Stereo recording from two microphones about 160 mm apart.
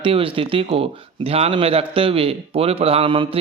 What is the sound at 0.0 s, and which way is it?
A man's voice, 35° right (ahead or behind).